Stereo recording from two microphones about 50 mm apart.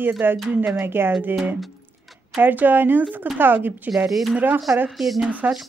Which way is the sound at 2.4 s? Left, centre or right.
Right.